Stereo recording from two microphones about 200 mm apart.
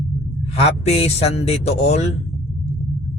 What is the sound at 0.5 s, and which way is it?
Speech, 30° left (ahead or behind).